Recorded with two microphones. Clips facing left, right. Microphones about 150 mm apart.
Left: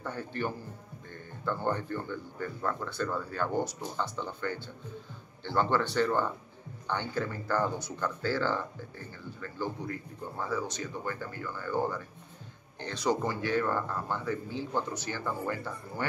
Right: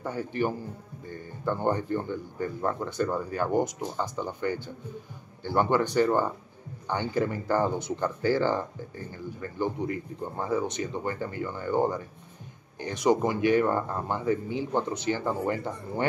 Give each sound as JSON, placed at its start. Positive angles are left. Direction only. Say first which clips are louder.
{"t": 0.0, "sound": "speech", "louder": "right 6 dB", "side_deg": -10}